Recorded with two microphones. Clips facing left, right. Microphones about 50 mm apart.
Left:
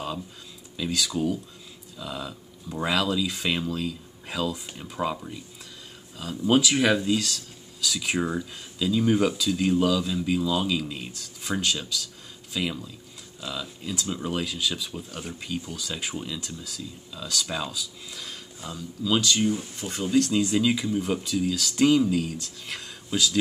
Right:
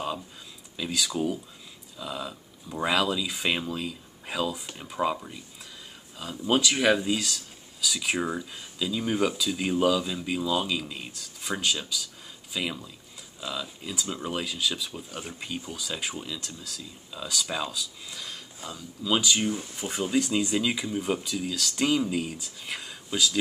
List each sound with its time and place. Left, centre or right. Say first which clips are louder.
0.7 s speech: left 2 dB; centre
19.0 s speech: left 2 dB; centre